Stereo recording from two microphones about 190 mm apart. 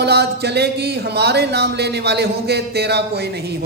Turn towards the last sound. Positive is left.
turn(degrees=-60)  # may be behind; listen again after turning